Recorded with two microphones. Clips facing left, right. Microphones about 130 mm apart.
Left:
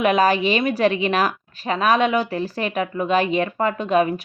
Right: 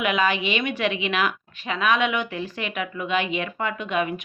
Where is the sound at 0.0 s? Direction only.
40° left (ahead or behind).